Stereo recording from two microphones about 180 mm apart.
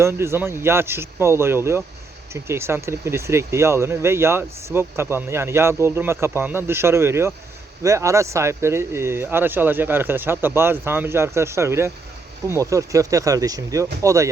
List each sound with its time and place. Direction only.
0.0 s speech: 15° right (ahead or behind)